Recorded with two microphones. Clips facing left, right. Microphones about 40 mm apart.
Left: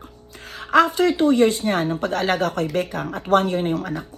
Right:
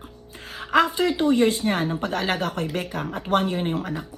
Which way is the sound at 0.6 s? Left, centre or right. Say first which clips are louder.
Left 3 dB; centre.